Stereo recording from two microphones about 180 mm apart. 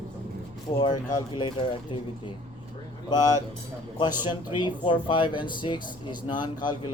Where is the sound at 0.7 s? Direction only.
25° left (ahead or behind).